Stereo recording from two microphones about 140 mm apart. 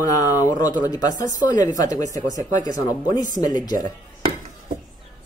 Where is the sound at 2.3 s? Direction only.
65° right (ahead or behind).